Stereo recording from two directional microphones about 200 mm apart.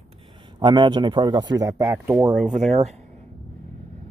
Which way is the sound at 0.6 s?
25° right (ahead or behind).